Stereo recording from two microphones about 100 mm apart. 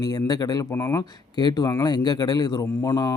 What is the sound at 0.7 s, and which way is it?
Speech, 25° left (ahead or behind).